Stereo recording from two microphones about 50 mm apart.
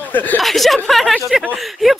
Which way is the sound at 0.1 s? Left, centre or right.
Left.